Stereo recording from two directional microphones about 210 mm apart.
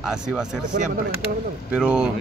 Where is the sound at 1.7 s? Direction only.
5° right (ahead or behind).